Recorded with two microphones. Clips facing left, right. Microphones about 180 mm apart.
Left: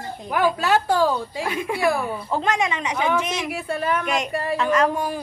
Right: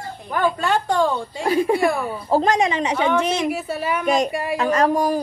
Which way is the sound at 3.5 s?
Centre (ahead or behind).